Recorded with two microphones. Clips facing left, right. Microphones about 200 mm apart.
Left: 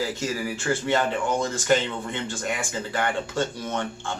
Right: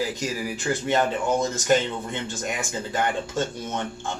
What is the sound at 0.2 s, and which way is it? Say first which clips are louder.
A man's voice: even; 15° right (ahead or behind).